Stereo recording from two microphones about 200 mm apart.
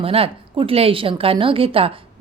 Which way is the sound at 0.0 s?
30° right (ahead or behind).